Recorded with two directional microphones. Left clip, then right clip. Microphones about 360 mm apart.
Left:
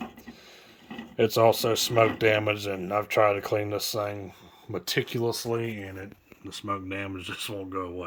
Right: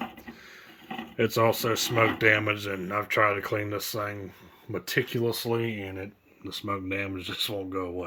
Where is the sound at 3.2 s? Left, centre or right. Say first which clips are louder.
Left 2 dB; left.